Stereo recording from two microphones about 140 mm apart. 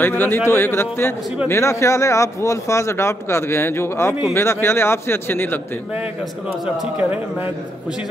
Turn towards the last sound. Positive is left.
turn(degrees=-10)  # may be behind; listen again after turning